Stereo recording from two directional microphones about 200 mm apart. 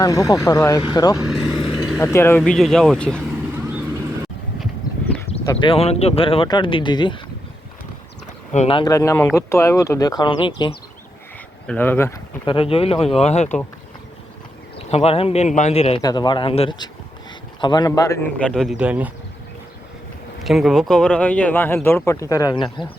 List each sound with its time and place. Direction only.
0.0 s speech: 15° left (ahead or behind)
1.3 s vehicle: centre (ahead or behind)
1.8 s a man's voice: 15° left (ahead or behind)
5.5 s a man's voice: 25° left (ahead or behind)
8.5 s a man's voice: 25° left (ahead or behind)
8.9 s speech: 15° left (ahead or behind)
11.6 s speech: 5° left (ahead or behind)
12.5 s a man's voice: 25° left (ahead or behind)
14.8 s a man's voice: 30° left (ahead or behind); by 19.1 s 5° right (ahead or behind)
20.4 s speech: centre (ahead or behind); by 22.9 s 25° left (ahead or behind)